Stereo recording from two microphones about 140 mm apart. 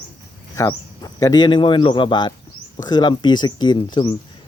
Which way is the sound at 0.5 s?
25° left (ahead or behind).